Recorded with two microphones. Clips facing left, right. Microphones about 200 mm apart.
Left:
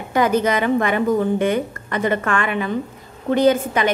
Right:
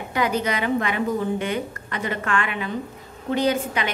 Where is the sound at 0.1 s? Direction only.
45° left (ahead or behind).